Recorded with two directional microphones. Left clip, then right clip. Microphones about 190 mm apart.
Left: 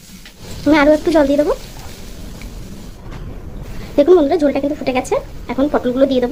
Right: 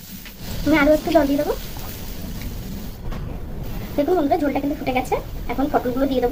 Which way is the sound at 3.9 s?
50° left (ahead or behind).